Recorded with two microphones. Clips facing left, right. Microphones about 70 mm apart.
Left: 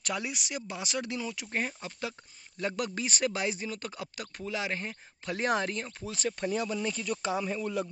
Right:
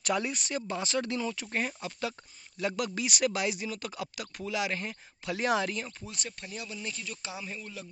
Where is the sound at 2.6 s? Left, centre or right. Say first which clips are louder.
Right 1 dB; left.